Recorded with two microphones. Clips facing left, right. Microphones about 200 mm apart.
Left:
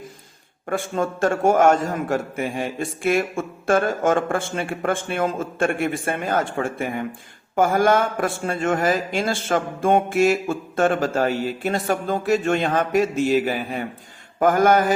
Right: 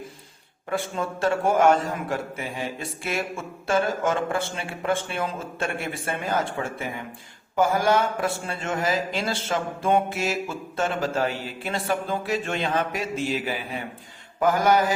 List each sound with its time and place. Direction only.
0.7 s a man's voice: 45° left (ahead or behind)